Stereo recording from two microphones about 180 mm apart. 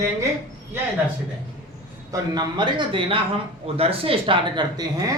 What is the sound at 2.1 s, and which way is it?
A man's voice, 25° right (ahead or behind).